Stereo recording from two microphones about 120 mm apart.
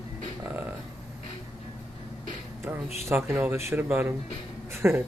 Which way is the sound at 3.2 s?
5° right (ahead or behind).